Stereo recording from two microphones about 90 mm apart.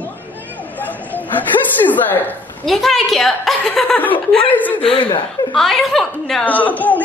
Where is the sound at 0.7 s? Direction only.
20° left (ahead or behind).